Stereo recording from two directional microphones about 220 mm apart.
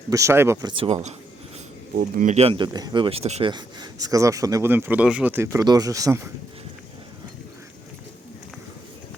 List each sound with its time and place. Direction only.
0.1 s speech: 15° right (ahead or behind)
2.0 s speech: 35° right (ahead or behind); by 6.3 s 15° right (ahead or behind)